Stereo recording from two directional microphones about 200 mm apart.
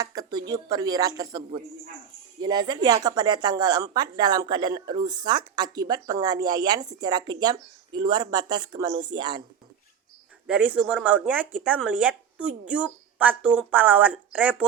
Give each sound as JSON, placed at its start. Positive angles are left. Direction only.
{"t": 0.0, "sound": "speech", "side_deg": -20}
{"t": 10.4, "sound": "speech", "side_deg": -5}